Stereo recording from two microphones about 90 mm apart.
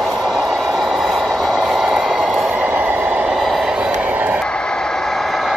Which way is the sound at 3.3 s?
Centre (ahead or behind).